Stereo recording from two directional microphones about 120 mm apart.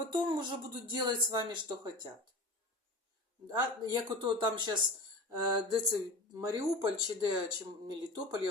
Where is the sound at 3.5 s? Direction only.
35° right (ahead or behind).